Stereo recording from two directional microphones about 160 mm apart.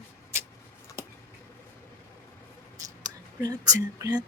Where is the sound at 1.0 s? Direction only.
15° right (ahead or behind).